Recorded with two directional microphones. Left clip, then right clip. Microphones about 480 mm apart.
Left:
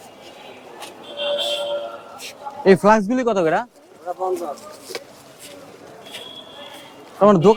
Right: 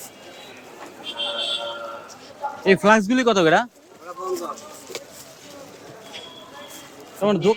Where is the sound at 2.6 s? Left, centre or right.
Left.